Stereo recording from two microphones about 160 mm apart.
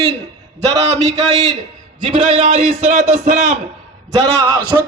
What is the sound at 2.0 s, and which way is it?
A man's voice, 35° right (ahead or behind).